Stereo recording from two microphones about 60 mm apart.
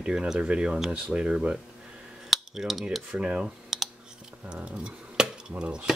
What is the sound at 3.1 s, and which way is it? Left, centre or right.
Speech, centre.